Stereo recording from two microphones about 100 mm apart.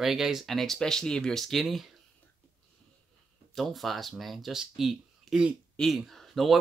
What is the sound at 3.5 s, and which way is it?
Speech, centre (ahead or behind).